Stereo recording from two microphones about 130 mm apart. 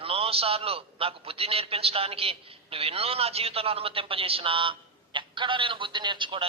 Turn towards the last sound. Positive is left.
turn(degrees=-40)  # may be behind; listen again after turning